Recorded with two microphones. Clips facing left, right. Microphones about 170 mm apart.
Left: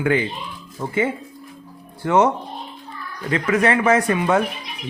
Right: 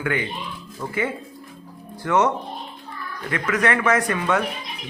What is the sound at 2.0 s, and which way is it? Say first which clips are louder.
Speech: left 3 dB; 30° left (ahead or behind).